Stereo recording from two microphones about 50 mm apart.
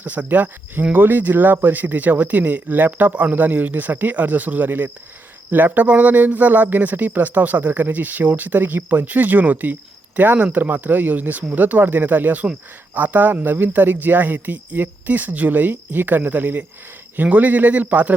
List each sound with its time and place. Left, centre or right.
0.0 s speech: right